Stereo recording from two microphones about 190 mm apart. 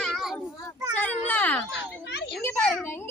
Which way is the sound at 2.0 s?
65° left (ahead or behind).